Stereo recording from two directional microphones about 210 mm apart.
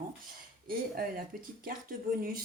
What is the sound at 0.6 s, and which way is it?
Speech, 45° right (ahead or behind).